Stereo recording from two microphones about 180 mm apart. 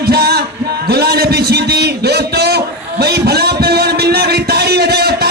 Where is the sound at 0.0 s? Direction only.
60° right (ahead or behind).